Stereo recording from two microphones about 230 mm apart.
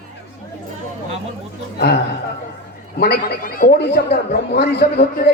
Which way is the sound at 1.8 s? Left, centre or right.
Left.